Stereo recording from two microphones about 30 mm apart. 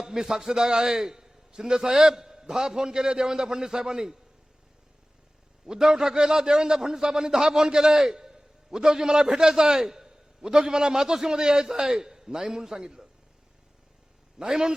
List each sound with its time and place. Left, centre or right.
0.0 s a man's voice: centre
5.6 s a man's voice: right
14.3 s a man's voice: right